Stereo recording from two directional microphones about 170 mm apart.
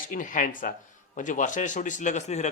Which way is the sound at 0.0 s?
50° left (ahead or behind).